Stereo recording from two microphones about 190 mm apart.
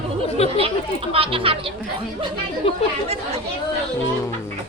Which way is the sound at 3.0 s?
30° right (ahead or behind).